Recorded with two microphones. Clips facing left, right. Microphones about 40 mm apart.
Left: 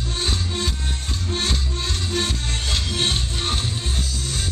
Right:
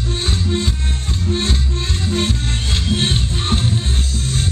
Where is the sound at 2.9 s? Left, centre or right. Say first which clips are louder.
Right 6 dB; right.